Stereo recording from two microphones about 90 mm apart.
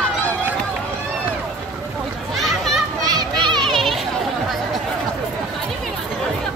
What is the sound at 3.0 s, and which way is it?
Children playing, 45° right (ahead or behind).